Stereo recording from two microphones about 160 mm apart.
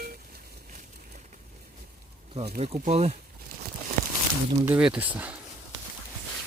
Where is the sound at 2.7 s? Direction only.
45° right (ahead or behind).